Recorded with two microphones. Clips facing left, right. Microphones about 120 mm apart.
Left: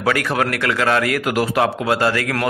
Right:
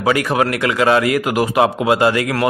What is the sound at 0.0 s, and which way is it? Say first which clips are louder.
A man's voice: right 3 dB; 10° right (ahead or behind).